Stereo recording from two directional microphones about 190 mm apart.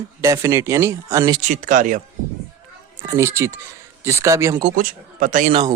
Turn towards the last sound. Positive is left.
turn(degrees=-25)  # may be behind; listen again after turning